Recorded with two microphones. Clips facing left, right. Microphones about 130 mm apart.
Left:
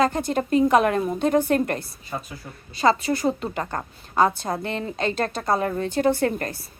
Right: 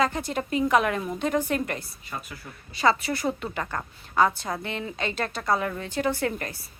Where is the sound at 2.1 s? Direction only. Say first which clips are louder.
Left 4 dB; 35° left (ahead or behind).